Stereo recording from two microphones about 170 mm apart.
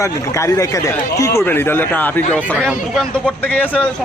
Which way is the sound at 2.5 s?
5° right (ahead or behind).